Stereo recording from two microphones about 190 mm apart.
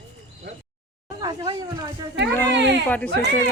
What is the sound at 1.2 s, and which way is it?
Speech, 20° right (ahead or behind).